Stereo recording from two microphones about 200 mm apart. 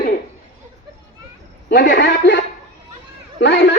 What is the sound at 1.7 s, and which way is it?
Speech, 60° left (ahead or behind).